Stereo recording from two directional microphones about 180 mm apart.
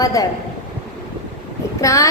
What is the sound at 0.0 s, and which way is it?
Speech, 20° left (ahead or behind).